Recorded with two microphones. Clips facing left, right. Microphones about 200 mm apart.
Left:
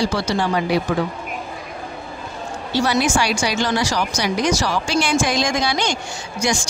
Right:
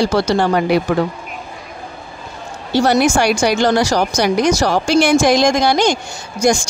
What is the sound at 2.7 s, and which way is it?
Speech, 55° right (ahead or behind).